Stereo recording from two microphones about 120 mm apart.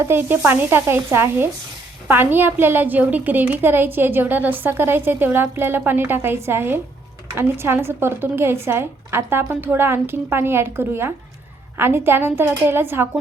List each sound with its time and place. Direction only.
0.0 s a woman's voice: 20° right (ahead or behind)